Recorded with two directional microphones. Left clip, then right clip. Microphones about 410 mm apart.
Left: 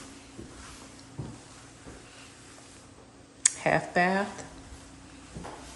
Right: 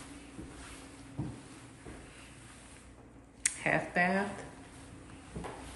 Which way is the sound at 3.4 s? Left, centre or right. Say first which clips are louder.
Left 5 dB; centre.